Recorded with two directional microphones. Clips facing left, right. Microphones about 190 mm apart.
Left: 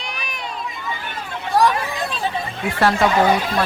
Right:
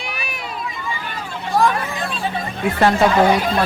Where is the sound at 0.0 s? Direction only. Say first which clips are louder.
Right 2 dB; 10° right (ahead or behind).